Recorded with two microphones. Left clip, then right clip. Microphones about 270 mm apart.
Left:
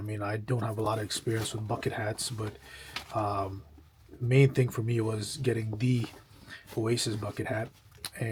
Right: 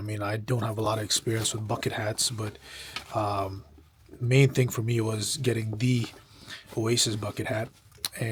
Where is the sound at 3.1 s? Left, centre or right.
Right.